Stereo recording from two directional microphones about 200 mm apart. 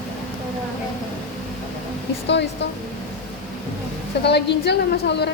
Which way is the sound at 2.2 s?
60° left (ahead or behind).